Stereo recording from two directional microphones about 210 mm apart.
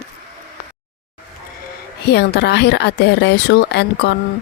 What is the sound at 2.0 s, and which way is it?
Speech, 50° left (ahead or behind).